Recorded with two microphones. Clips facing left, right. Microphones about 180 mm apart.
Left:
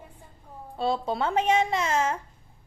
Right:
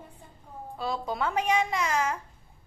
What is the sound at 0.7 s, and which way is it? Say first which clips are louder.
Speech: left 5 dB; 30° left (ahead or behind).